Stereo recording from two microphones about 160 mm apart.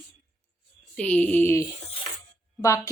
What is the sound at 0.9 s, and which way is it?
A woman's voice, 10° left (ahead or behind).